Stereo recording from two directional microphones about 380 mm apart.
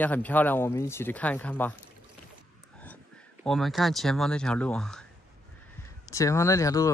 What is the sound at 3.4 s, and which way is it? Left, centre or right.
Speech, centre.